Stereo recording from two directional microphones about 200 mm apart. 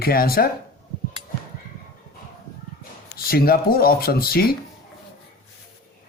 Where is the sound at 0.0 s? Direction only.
50° left (ahead or behind).